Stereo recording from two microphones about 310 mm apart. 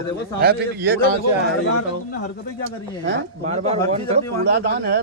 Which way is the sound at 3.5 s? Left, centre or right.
Centre.